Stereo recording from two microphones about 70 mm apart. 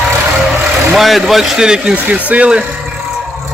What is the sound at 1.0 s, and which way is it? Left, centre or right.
Speech, centre.